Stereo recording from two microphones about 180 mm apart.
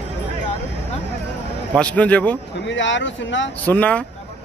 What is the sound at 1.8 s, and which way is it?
Speech, 5° left (ahead or behind).